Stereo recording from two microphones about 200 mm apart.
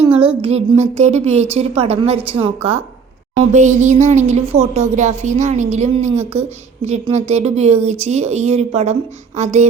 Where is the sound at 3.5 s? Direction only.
35° right (ahead or behind).